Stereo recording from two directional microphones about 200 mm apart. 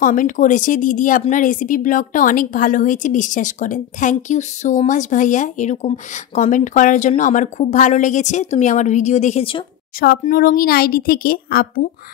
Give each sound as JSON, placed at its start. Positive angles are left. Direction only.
{"t": 0.0, "sound": "a woman's voice", "side_deg": 40}
{"t": 9.9, "sound": "speech", "side_deg": 45}